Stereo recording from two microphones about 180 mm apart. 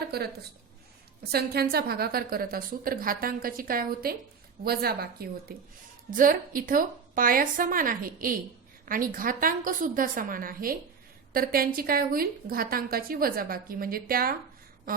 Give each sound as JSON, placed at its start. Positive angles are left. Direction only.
{"t": 0.1, "sound": "a woman's voice", "side_deg": -60}
{"t": 1.3, "sound": "a woman's voice", "side_deg": -60}
{"t": 14.9, "sound": "a sound", "side_deg": -55}